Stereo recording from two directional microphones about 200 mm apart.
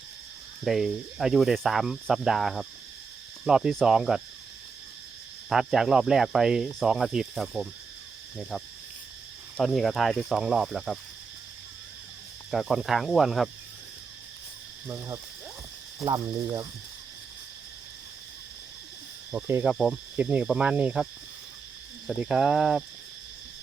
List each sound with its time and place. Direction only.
0.6 s cricket: centre (ahead or behind)
5.5 s cricket: centre (ahead or behind)
12.5 s cricket: centre (ahead or behind)
14.8 s speech: 15° right (ahead or behind)
16.0 s cricket: 20° right (ahead or behind)
19.3 s speech: 10° right (ahead or behind)
22.0 s cricket: centre (ahead or behind)